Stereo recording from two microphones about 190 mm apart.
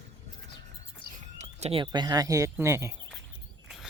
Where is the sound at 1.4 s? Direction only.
35° right (ahead or behind); by 2.9 s 15° right (ahead or behind).